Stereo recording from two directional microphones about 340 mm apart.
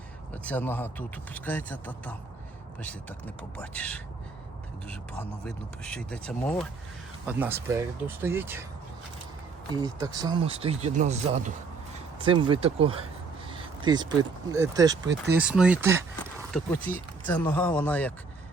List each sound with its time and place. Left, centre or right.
0.4 s a man's voice: centre
5.5 s a man's voice: centre
9.7 s a man's voice: centre